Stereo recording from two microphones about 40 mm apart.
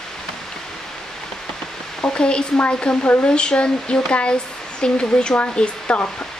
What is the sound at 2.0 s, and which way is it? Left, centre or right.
Speech, left.